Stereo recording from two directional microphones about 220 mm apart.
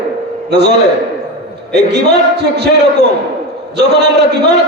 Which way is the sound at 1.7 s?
50° right (ahead or behind).